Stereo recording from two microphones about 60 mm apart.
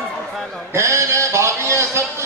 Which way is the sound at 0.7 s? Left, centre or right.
Right.